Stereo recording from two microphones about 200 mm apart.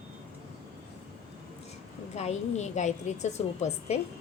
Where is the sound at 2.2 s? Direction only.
35° left (ahead or behind).